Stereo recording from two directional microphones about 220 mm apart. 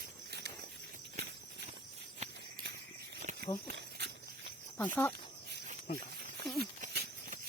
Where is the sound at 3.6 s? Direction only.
50° right (ahead or behind).